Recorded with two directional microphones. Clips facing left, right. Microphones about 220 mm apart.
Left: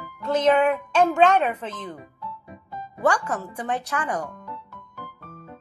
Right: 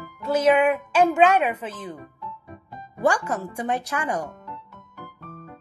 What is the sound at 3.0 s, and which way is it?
Speech, 10° right (ahead or behind).